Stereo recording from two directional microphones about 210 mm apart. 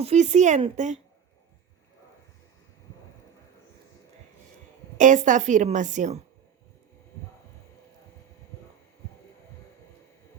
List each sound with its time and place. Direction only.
0.0 s a woman's voice: 30° right (ahead or behind)
4.9 s a woman's voice: 35° right (ahead or behind)